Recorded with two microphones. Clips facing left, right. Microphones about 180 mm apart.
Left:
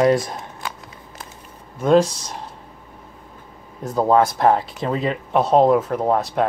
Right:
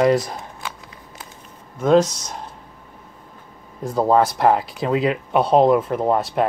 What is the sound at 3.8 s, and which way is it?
Speech, centre (ahead or behind).